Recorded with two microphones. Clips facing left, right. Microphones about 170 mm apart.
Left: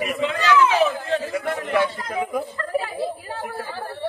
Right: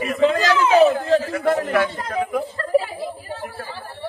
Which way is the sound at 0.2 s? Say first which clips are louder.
Right 2 dB; 35° right (ahead or behind).